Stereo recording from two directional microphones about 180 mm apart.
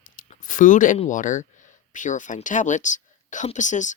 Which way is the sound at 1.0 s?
45° left (ahead or behind).